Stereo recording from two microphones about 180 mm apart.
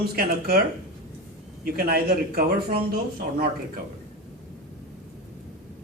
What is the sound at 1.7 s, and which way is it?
A man's voice, 60° right (ahead or behind).